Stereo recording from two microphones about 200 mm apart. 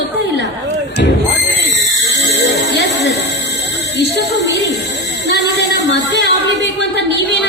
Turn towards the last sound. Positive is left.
turn(degrees=60)  # may be behind; listen again after turning